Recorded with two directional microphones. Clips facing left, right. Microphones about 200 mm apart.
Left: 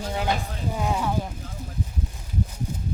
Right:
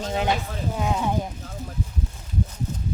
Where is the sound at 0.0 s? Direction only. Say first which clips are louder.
Right 3 dB; 20° right (ahead or behind).